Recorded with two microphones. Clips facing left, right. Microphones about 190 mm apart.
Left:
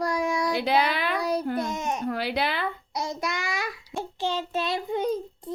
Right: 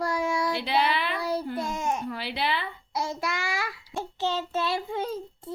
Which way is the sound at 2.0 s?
45° left (ahead or behind).